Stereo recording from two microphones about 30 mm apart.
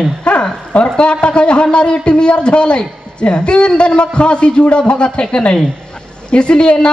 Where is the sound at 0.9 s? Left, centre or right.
Left.